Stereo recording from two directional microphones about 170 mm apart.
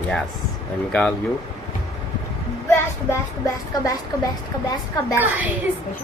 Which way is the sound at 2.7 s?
20° left (ahead or behind).